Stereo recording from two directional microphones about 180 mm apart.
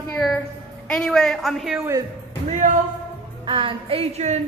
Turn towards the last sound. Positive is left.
turn(degrees=-35)  # may be behind; listen again after turning